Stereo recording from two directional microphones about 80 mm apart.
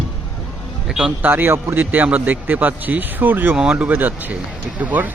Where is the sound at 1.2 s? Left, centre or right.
Right.